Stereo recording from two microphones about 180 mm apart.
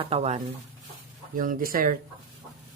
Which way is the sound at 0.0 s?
35° right (ahead or behind).